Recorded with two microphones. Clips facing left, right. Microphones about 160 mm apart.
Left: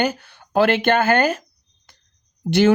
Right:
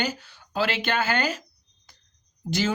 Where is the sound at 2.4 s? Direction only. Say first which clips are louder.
Left 11 dB; 65° left (ahead or behind).